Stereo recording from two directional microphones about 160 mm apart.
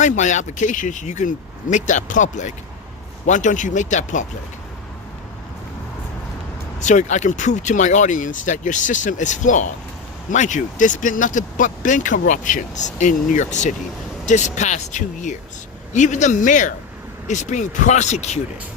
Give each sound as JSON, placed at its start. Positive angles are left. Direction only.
{"t": 0.0, "sound": "speech", "side_deg": 50}
{"t": 6.7, "sound": "speech", "side_deg": 50}